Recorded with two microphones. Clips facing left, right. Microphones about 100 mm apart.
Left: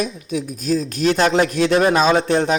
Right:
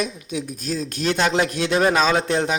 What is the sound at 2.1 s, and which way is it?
Speech, 30° left (ahead or behind).